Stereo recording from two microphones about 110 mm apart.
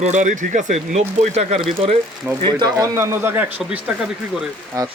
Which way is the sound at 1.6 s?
55° right (ahead or behind).